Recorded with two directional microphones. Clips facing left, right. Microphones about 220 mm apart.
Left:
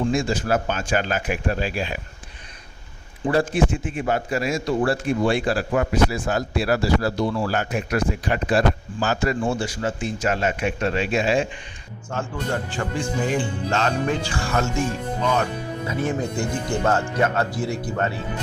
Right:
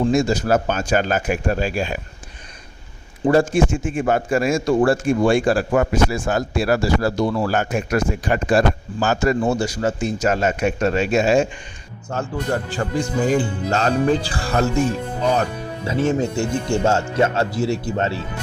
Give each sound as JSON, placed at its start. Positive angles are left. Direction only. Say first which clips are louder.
{"t": 0.0, "sound": "a man's voice", "louder": "right 4 dB", "side_deg": -40}
{"t": 3.2, "sound": "a man's voice", "louder": "right 4 dB", "side_deg": -45}
{"t": 12.7, "sound": "speech", "louder": "right 4 dB", "side_deg": -40}
{"t": 15.9, "sound": "speech", "louder": "right 6 dB", "side_deg": -25}